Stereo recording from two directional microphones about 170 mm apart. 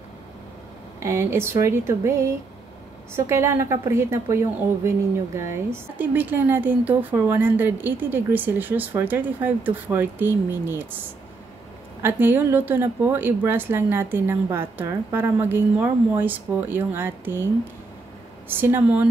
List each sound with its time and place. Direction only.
0.9 s a woman's voice: 15° right (ahead or behind)
3.3 s a woman's voice: 15° right (ahead or behind)
12.0 s a woman's voice: 10° right (ahead or behind)
18.5 s a woman's voice: 10° right (ahead or behind)